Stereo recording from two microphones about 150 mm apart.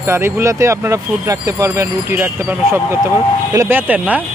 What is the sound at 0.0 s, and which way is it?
Speech, 15° right (ahead or behind).